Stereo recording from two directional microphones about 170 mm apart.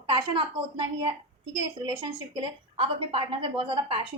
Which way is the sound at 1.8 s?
30° right (ahead or behind).